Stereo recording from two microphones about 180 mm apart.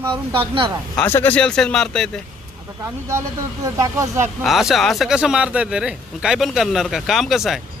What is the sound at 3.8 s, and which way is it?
Speech, 15° right (ahead or behind).